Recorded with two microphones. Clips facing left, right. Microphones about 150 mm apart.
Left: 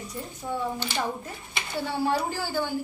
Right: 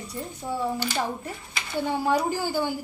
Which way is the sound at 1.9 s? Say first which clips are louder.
Right 2 dB; 15° right (ahead or behind).